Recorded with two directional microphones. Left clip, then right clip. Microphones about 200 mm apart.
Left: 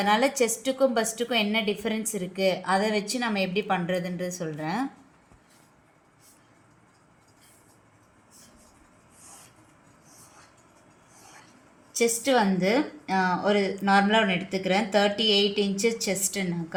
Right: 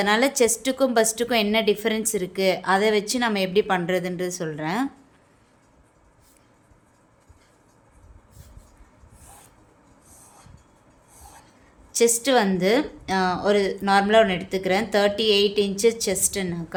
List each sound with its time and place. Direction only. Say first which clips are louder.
0.0 s a woman's voice: right 3 dB; 35° right (ahead or behind)
11.9 s a woman's voice: right 4 dB; 35° right (ahead or behind)